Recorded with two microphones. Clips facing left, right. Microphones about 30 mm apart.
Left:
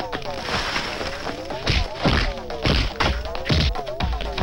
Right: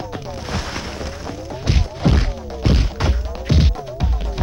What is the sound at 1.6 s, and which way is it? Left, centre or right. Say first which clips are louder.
Thunk: right 1 dB; left.